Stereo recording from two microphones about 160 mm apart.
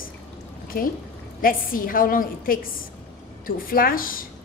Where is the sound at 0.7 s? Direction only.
65° left (ahead or behind).